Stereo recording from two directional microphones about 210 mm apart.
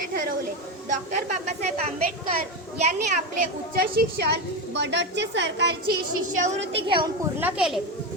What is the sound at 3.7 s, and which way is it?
A woman's voice, 50° right (ahead or behind).